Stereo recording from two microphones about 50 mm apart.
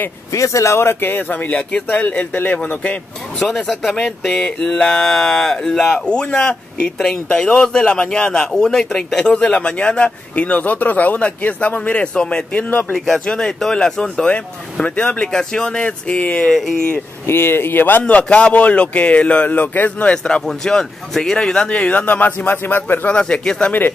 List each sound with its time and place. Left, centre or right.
0.3 s speech: left
3.3 s speech: centre
5.9 s speech: left
12.9 s speech: centre
13.2 s speech: centre
17.3 s speech: left
18.0 s speech: left
20.4 s speech: centre; by 22.9 s left
23.0 s speech: left